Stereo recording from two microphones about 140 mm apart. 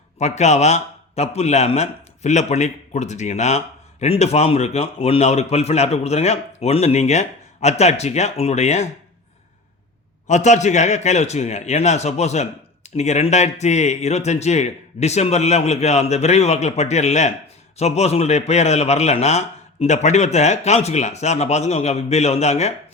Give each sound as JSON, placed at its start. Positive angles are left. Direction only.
{"t": 0.2, "sound": "a man's voice", "side_deg": 55}
{"t": 10.2, "sound": "a man's voice", "side_deg": 60}